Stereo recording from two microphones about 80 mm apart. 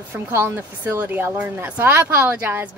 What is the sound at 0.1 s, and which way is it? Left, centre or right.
A woman's voice, right.